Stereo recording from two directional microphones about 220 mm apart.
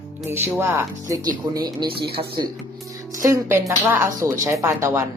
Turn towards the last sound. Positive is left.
turn(degrees=-10)  # may be behind; listen again after turning